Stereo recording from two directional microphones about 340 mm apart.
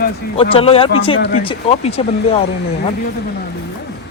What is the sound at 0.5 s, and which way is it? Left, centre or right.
Speech, centre.